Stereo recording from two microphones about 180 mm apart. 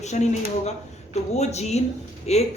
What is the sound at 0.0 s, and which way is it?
A man's voice, 40° left (ahead or behind).